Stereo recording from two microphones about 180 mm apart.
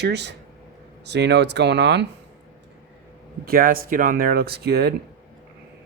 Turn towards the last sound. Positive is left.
turn(degrees=-60)  # may be behind; listen again after turning